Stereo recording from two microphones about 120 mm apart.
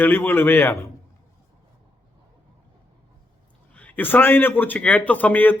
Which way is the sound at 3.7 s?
15° left (ahead or behind).